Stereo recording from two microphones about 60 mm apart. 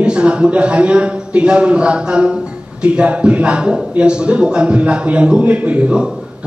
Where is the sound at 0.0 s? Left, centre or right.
Centre.